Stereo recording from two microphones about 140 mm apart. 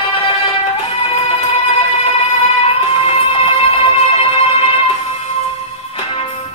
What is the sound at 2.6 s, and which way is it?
Music, 40° left (ahead or behind).